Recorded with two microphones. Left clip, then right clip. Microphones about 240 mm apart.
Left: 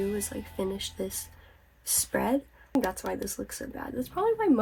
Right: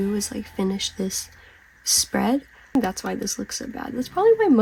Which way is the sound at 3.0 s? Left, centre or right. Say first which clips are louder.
Right 5 dB; right.